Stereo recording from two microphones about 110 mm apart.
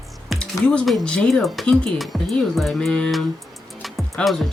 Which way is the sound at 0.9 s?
5° left (ahead or behind).